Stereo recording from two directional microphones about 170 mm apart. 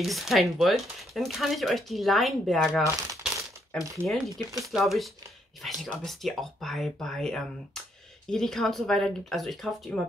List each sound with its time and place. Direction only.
0.0 s speech: centre (ahead or behind)
2.8 s crumpling: 20° right (ahead or behind)
4.0 s speech: 5° left (ahead or behind)